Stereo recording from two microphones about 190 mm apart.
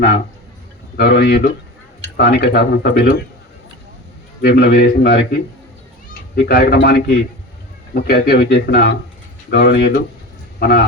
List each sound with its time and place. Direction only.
0.9 s speech: 60° left (ahead or behind)
4.4 s speech: 60° left (ahead or behind)